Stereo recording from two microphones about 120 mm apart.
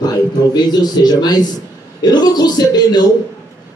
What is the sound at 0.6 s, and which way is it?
A man's voice, 35° left (ahead or behind).